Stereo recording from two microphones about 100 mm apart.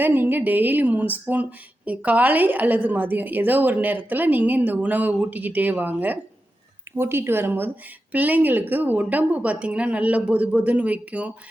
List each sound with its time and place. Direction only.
0.0 s a woman's voice: 20° right (ahead or behind)